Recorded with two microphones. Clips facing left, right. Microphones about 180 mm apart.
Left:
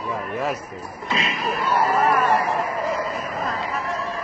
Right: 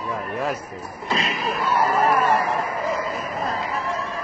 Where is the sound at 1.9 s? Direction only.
35° right (ahead or behind).